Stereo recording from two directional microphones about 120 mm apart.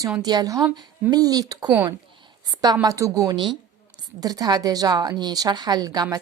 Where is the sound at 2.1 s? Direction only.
35° right (ahead or behind).